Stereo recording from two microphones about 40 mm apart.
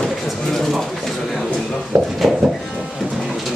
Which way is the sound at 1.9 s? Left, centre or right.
Right.